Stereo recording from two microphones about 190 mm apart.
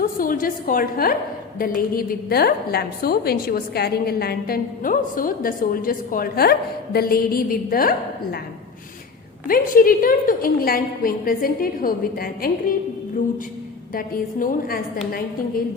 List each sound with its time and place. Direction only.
0.0 s a woman's voice: 50° left (ahead or behind)
9.5 s a woman's voice: 50° left (ahead or behind)
13.9 s a woman's voice: 50° left (ahead or behind)